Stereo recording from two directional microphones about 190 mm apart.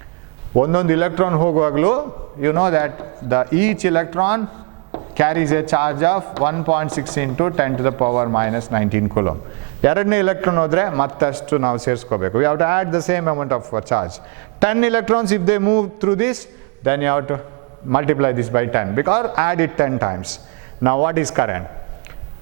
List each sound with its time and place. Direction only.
0.6 s a man's voice: 15° right (ahead or behind)
14.6 s a man's voice: 15° right (ahead or behind)